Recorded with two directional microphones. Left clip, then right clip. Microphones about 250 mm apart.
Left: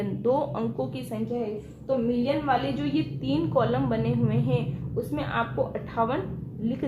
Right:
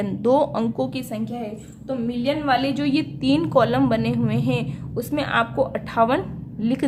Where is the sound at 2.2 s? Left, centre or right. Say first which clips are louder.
Right 4 dB; right.